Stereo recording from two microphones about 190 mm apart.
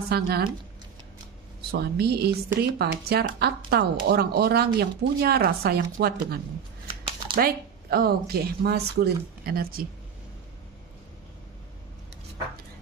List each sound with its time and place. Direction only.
0.1 s speech: 55° right (ahead or behind)
1.7 s speech: 55° right (ahead or behind)